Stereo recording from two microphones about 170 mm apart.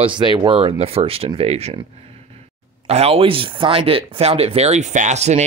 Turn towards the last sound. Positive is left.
turn(degrees=-40)  # may be behind; listen again after turning